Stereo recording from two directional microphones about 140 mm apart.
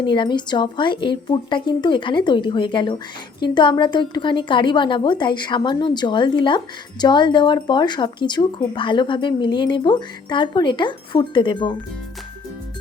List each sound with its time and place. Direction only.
0.0 s speech: 35° left (ahead or behind)